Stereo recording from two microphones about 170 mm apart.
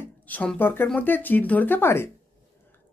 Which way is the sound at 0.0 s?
10° left (ahead or behind).